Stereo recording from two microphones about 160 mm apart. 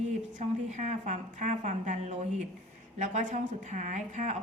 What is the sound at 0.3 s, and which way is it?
A woman's voice, 50° right (ahead or behind).